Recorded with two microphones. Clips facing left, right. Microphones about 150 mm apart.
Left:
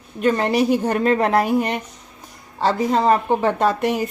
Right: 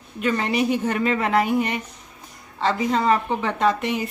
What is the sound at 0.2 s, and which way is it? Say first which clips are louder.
A woman's voice: left 4 dB; 40° left (ahead or behind).